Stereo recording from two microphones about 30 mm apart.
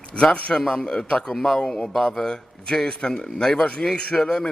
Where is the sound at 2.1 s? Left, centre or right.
Centre.